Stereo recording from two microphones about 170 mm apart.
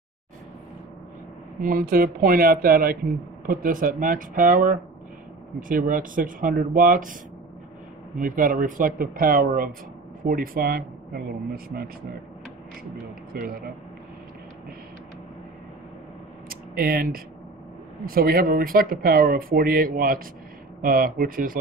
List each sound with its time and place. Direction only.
1.6 s speech: 55° right (ahead or behind)
8.3 s speech: 55° right (ahead or behind)
12.9 s speech: 55° right (ahead or behind)
16.4 s a sound: 60° right (ahead or behind)
18.0 s speech: 60° right (ahead or behind)